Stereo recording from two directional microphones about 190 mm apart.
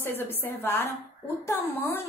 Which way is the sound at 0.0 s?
10° left (ahead or behind).